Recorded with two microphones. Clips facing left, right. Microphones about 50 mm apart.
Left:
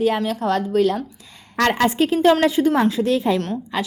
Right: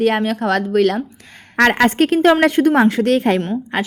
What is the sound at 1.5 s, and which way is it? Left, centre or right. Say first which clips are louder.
Speech: right 5 dB; right.